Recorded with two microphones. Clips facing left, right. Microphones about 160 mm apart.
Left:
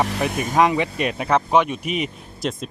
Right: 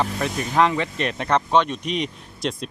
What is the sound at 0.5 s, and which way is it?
Speech, 15° left (ahead or behind).